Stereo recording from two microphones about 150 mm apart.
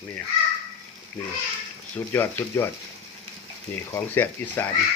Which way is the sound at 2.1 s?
15° left (ahead or behind).